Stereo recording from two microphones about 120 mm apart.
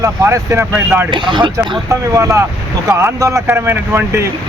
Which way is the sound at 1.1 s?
40° right (ahead or behind).